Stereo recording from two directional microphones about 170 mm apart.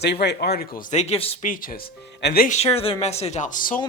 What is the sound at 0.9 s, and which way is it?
Speech, 35° left (ahead or behind).